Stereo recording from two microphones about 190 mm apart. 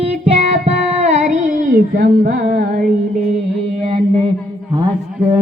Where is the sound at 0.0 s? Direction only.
35° right (ahead or behind).